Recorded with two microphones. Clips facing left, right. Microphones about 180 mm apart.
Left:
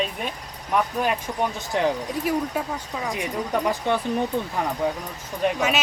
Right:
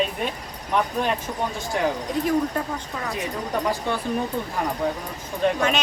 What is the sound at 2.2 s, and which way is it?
Speech, 5° left (ahead or behind).